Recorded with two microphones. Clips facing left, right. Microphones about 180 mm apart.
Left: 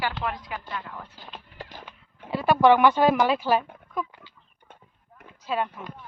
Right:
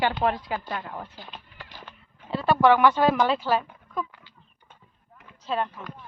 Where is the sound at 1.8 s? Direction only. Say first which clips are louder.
Left 1 dB; 10° left (ahead or behind).